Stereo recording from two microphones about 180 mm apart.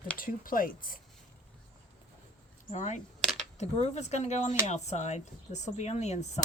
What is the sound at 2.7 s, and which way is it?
Speech, 40° left (ahead or behind).